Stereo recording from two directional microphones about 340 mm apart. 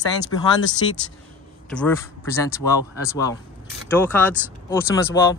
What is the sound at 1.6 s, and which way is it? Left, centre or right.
Speech, centre.